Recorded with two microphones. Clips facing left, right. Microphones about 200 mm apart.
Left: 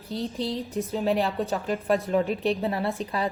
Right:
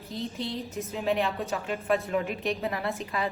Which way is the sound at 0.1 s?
35° left (ahead or behind).